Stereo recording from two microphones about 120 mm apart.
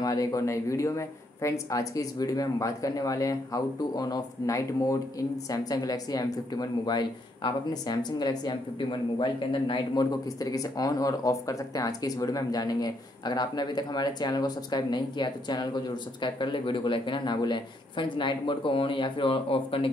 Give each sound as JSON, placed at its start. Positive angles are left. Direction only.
{"t": 0.0, "sound": "speech", "side_deg": 30}